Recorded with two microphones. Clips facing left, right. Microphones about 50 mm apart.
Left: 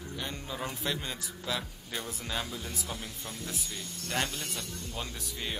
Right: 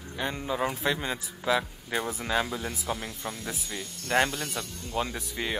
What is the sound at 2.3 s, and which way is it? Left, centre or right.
Speech, right.